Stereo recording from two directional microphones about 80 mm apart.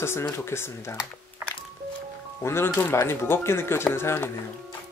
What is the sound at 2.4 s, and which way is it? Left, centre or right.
Speech, left.